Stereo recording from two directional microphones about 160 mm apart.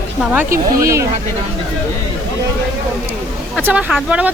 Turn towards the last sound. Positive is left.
turn(degrees=-10)  # may be behind; listen again after turning